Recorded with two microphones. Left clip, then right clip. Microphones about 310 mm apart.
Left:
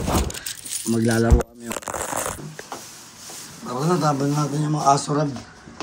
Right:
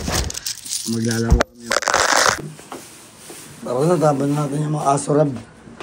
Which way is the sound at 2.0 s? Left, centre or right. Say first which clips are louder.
Right 13 dB; right.